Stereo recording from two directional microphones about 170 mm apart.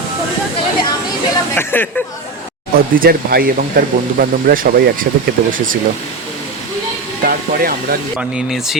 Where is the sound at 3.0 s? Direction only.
60° right (ahead or behind).